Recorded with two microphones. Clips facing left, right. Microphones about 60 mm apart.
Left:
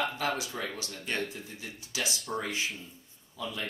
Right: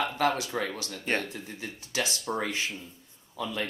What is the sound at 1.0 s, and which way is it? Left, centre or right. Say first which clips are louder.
Speech: right 4 dB; right.